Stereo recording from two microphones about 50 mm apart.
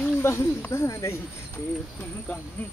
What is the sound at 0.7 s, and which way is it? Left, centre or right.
Speech, left.